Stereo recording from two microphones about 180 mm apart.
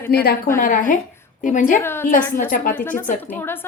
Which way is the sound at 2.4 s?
50° left (ahead or behind).